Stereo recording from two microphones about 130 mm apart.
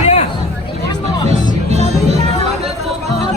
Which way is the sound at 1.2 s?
60° right (ahead or behind).